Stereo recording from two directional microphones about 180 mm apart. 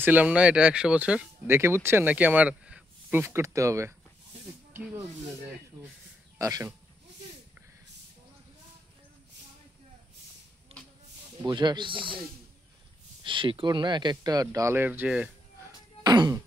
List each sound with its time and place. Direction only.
0.0 s speech: 10° right (ahead or behind)
6.3 s speech: 15° right (ahead or behind)
11.4 s speech: 25° right (ahead or behind)
13.2 s speech: 30° right (ahead or behind); by 15.3 s 5° right (ahead or behind)
16.0 s music: 25° right (ahead or behind)